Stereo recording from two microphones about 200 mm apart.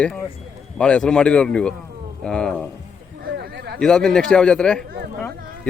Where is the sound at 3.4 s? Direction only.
55° right (ahead or behind).